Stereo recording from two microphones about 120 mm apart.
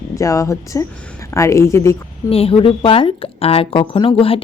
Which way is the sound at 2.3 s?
50° left (ahead or behind).